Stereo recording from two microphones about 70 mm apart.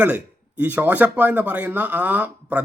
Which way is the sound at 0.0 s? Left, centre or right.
Right.